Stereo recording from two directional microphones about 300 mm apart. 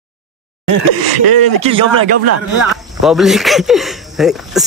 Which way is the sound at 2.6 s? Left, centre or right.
Centre.